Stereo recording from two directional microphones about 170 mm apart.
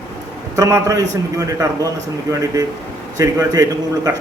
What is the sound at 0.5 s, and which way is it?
A man's voice, 20° right (ahead or behind).